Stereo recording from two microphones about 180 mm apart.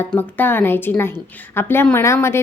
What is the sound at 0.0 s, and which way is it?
A woman's voice, 10° left (ahead or behind).